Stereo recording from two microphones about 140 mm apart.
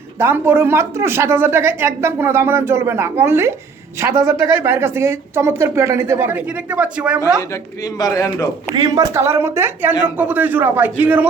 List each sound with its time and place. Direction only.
0.2 s a woman's voice: 15° right (ahead or behind)
7.9 s a man's voice: 25° left (ahead or behind)
8.7 s a woman's voice: 25° right (ahead or behind)